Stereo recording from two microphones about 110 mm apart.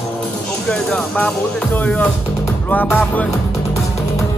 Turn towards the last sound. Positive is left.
turn(degrees=15)  # may be behind; listen again after turning